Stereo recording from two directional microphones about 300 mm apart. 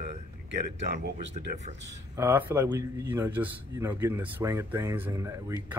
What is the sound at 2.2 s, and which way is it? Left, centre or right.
Speech, centre.